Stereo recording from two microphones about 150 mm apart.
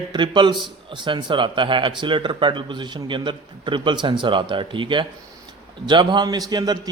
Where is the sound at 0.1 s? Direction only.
30° right (ahead or behind).